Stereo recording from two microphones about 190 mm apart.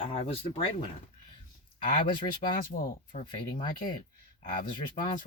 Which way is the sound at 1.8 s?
50° left (ahead or behind).